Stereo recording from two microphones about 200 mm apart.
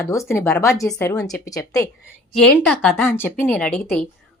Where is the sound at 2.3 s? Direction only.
5° left (ahead or behind).